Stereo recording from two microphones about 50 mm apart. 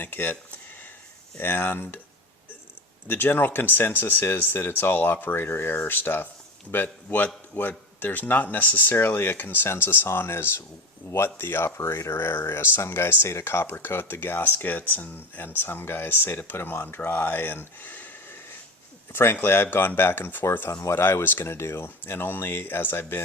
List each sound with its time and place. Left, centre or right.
0.0 s speech: left
1.4 s speech: left
3.1 s speech: left
6.8 s speech: left
10.1 s speech: left
11.8 s speech: left
12.1 s speech: left
13.2 s speech: left
19.1 s speech: left
20.7 s speech: left
21.0 s speech: left
21.8 s speech: left